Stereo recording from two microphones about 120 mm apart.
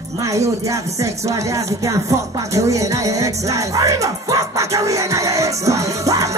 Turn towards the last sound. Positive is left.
turn(degrees=-25)  # may be behind; listen again after turning